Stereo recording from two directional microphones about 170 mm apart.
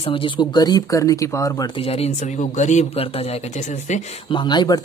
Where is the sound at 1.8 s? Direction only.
35° left (ahead or behind).